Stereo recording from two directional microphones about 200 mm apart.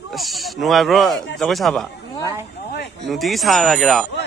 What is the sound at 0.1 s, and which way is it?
Speech, centre (ahead or behind).